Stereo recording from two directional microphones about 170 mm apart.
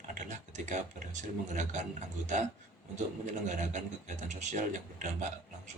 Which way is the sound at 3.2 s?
45° right (ahead or behind).